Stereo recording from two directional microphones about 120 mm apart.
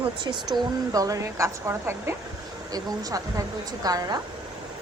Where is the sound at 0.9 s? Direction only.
30° right (ahead or behind).